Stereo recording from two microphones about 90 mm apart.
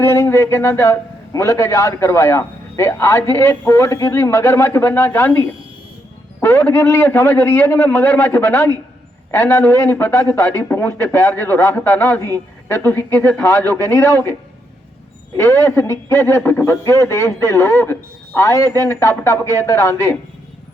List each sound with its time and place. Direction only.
0.0 s a man's voice: 30° left (ahead or behind)
15.4 s a man's voice: 30° left (ahead or behind)